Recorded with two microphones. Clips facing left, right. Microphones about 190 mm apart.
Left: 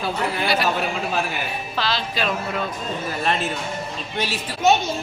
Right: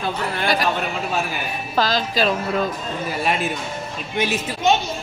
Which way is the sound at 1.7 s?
45° right (ahead or behind).